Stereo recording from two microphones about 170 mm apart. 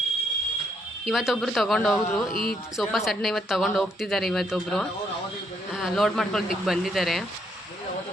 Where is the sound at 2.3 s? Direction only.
60° left (ahead or behind).